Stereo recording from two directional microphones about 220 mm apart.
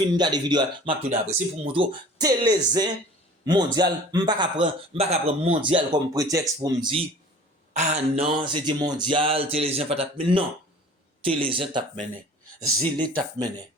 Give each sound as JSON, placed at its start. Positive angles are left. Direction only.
{"t": 0.2, "sound": "speech", "side_deg": -20}
{"t": 7.7, "sound": "speech", "side_deg": -30}